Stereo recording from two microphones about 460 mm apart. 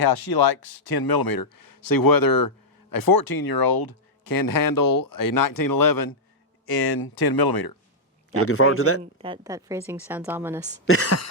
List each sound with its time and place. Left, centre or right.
0.0 s speech: left
8.3 s speech: left
9.1 s a woman's voice: centre
10.8 s speech: left